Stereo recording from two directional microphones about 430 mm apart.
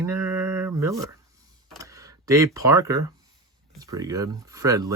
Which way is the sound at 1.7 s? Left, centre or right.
Centre.